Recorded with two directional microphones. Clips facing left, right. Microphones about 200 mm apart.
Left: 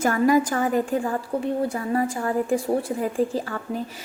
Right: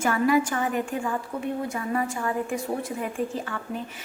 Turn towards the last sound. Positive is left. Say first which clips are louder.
# left 4 dB
turn(degrees=35)  # may be behind; listen again after turning